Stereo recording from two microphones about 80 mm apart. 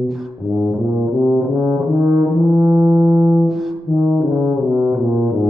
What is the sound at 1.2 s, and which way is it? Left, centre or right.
Brass instrument, centre.